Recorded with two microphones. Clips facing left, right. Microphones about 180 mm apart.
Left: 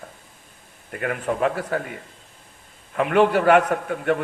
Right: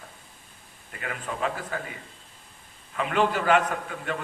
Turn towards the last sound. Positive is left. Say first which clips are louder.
# left 9 dB
turn(degrees=55)  # may be behind; listen again after turning